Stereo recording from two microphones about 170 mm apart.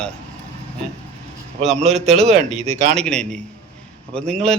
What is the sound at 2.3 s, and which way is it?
Speech, 40° right (ahead or behind).